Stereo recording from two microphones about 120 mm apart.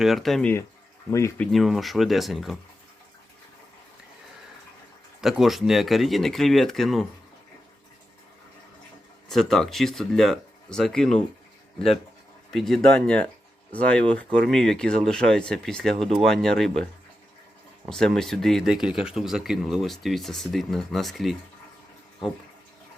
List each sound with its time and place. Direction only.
0.0 s speech: centre (ahead or behind)
1.5 s speech: centre (ahead or behind)
5.2 s speech: centre (ahead or behind)
9.3 s speech: 5° left (ahead or behind)
12.5 s speech: centre (ahead or behind)